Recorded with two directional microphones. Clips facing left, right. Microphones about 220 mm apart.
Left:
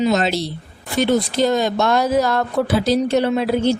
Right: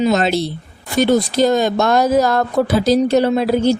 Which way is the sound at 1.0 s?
40° right (ahead or behind).